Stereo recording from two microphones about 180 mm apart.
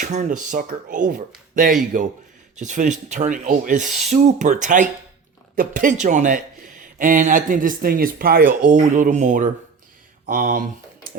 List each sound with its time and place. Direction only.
0.0 s speech: 40° right (ahead or behind)
3.8 s filing: centre (ahead or behind)
4.1 s speech: 40° right (ahead or behind)